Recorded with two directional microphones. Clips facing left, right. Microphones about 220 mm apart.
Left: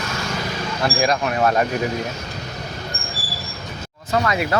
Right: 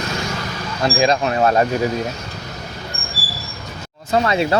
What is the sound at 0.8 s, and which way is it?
Speech, 25° right (ahead or behind).